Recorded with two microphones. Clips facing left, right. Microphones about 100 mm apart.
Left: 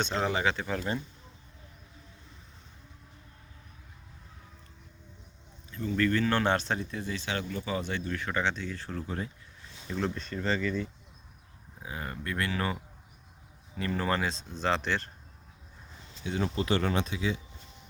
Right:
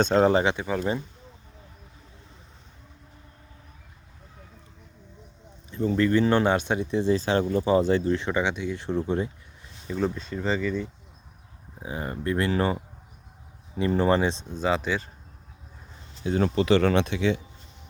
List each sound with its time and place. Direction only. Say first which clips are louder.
0.0 s speech: right 10 dB; 45° right (ahead or behind)
0.4 s speech: right 5 dB; 15° right (ahead or behind)
6.0 s speech: right 5 dB; 20° right (ahead or behind)
6.9 s speech: right 12 dB; 30° right (ahead or behind)
9.8 s speech: right 5 dB; 5° right (ahead or behind)
11.8 s speech: right 6 dB; 25° right (ahead or behind)
13.7 s speech: right 8 dB; 20° right (ahead or behind)
14.6 s speech: right 4 dB; 10° right (ahead or behind)
16.4 s speech: right 8 dB; 85° right